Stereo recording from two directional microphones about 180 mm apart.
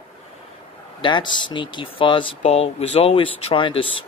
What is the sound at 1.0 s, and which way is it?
Speech, 25° left (ahead or behind).